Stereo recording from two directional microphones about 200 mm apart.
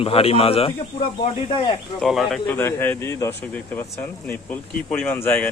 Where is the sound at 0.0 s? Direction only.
30° left (ahead or behind).